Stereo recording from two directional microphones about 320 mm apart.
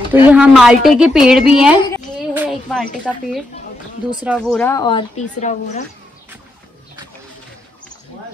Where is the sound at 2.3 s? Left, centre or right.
Centre.